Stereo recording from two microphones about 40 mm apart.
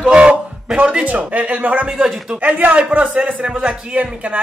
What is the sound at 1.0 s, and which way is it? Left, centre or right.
Speech, right.